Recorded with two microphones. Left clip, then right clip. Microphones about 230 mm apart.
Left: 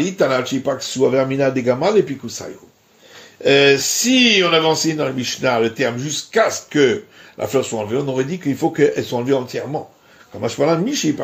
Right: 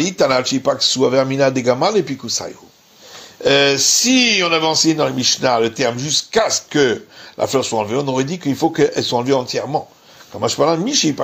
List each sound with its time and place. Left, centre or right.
0.0 s speech: right
3.4 s speech: centre